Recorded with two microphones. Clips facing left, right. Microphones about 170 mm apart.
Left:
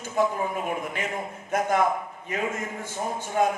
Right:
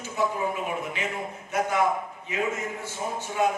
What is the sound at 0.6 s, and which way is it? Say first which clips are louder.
A man's voice: left 1 dB; 50° left (ahead or behind).